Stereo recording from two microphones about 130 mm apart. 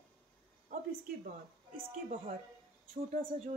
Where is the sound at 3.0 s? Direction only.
55° right (ahead or behind).